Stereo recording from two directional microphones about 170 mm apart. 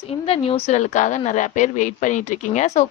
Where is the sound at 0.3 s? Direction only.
35° left (ahead or behind).